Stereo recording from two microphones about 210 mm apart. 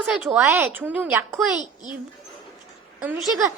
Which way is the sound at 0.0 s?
5° right (ahead or behind).